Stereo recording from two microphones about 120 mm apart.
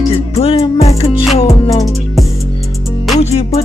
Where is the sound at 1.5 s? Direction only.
30° left (ahead or behind).